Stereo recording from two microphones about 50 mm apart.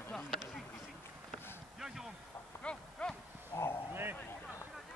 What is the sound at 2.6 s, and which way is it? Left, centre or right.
Speech, left.